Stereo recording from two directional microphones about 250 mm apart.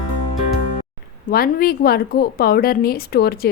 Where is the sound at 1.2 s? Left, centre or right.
Left.